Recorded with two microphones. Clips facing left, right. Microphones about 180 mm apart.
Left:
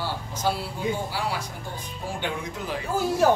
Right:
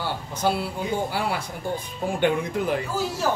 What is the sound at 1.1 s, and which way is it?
Speech, 55° right (ahead or behind).